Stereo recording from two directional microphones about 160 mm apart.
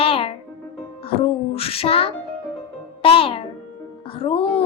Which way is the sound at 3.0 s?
35° left (ahead or behind).